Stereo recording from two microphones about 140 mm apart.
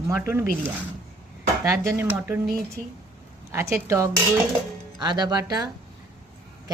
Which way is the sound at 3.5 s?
20° right (ahead or behind).